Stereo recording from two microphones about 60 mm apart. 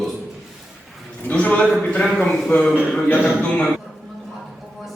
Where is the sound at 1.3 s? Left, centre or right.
Left.